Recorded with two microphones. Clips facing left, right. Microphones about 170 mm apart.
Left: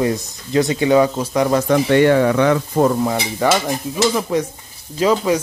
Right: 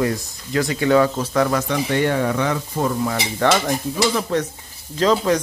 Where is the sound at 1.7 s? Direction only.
85° left.